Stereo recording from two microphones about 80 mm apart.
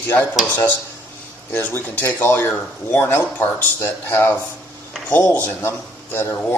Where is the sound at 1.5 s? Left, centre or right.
Left.